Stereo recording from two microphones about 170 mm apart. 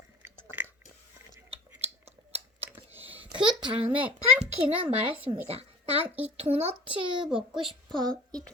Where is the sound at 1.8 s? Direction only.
35° right (ahead or behind).